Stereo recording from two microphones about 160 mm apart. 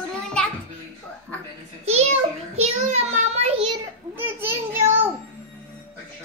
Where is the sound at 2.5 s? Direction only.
40° right (ahead or behind).